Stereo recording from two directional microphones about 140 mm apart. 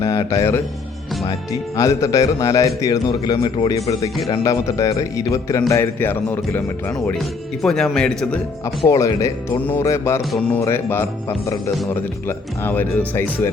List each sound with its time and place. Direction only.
0.0 s a man's voice: 25° left (ahead or behind)
3.1 s a man's voice: 35° left (ahead or behind); by 6.9 s 15° left (ahead or behind)
7.6 s a man's voice: centre (ahead or behind)
8.9 s a man's voice: 20° left (ahead or behind)
12.3 s speech: 15° left (ahead or behind)